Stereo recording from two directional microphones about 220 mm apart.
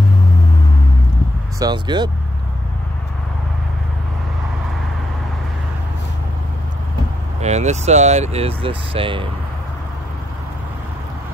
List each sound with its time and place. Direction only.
1.6 s speech: 20° right (ahead or behind)
7.3 s speech: 30° right (ahead or behind)